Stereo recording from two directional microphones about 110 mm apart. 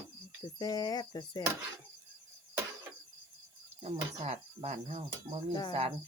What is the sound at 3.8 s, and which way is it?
Cricket, 70° right (ahead or behind).